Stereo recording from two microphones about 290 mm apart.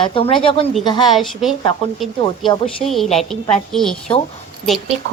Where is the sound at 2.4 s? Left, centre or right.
Centre.